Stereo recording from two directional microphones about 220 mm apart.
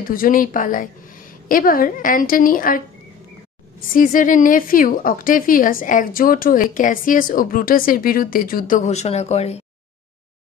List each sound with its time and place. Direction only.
0.0 s a woman's voice: 40° left (ahead or behind)
3.9 s a woman's voice: 35° left (ahead or behind)